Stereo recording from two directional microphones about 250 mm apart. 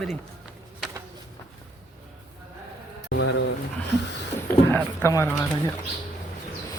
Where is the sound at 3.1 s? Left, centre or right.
Left.